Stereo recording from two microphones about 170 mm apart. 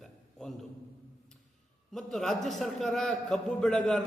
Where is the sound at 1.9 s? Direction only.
Centre (ahead or behind).